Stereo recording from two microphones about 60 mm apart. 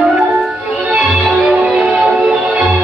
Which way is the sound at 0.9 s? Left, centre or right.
Centre.